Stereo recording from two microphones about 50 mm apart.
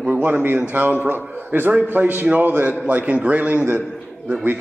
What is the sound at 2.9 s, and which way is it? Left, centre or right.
Speech, right.